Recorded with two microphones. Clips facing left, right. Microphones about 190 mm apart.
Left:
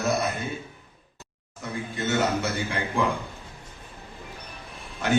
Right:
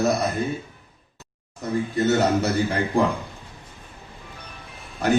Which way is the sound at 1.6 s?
40° right (ahead or behind).